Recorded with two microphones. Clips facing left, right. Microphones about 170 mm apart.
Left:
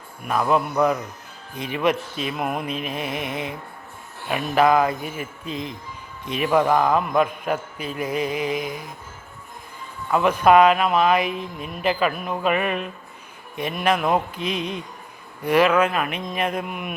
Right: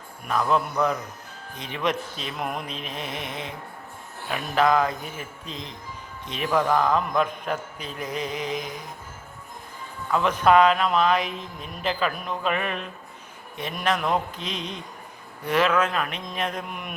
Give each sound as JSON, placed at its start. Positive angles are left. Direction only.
{"t": 0.3, "sound": "speech", "side_deg": 10}
{"t": 10.1, "sound": "speech", "side_deg": 10}